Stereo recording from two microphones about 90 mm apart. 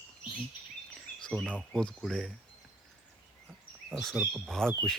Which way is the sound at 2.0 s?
Centre (ahead or behind).